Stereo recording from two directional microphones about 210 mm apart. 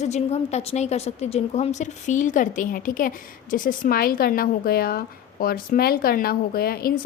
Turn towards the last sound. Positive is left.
turn(degrees=45)  # may be behind; listen again after turning